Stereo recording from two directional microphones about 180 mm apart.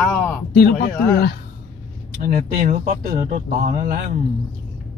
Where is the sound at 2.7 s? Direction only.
50° right (ahead or behind).